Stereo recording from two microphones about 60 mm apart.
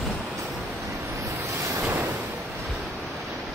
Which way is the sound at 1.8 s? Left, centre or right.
Right.